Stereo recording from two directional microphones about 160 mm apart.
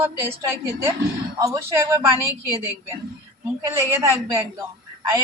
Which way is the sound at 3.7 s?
15° right (ahead or behind).